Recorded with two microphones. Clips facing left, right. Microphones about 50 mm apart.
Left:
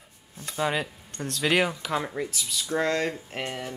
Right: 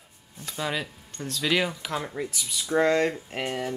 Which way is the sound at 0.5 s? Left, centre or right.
Centre.